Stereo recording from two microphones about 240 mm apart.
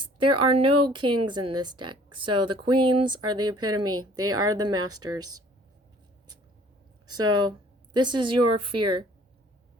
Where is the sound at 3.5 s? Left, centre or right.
Right.